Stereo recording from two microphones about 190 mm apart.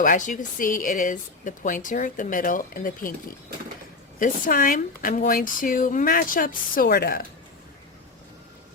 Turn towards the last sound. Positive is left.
turn(degrees=50)  # may be behind; listen again after turning